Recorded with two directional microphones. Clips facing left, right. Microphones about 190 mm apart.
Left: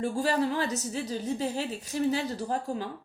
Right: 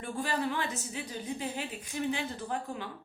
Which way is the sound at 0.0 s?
35° left (ahead or behind).